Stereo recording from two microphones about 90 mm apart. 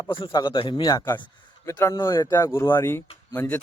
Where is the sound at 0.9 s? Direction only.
45° left (ahead or behind).